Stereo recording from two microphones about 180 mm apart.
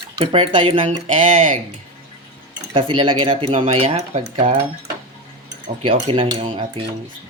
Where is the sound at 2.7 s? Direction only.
30° right (ahead or behind).